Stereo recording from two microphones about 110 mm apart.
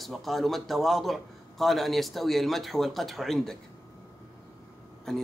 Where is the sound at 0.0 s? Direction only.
Centre (ahead or behind).